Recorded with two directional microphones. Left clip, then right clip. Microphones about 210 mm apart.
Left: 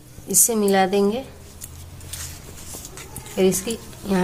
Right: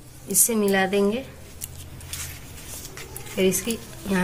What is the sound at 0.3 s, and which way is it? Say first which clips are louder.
Speech: left 3 dB; 40° left (ahead or behind).